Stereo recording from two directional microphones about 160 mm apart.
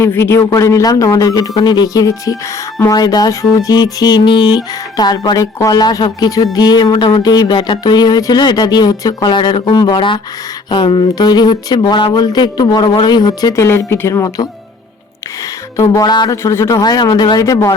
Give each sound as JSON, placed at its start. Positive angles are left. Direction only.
{"t": 0.0, "sound": "speech", "side_deg": 15}
{"t": 15.8, "sound": "speech", "side_deg": 25}